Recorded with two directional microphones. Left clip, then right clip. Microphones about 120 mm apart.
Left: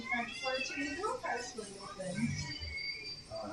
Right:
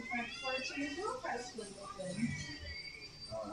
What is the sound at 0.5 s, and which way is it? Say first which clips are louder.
Speech: left 2 dB; 25° left (ahead or behind).